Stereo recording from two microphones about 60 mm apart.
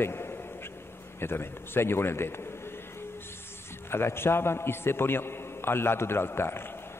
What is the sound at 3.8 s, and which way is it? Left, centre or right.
A man's voice, left.